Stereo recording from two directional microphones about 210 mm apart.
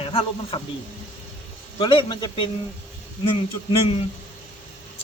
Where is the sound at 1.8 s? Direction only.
20° left (ahead or behind).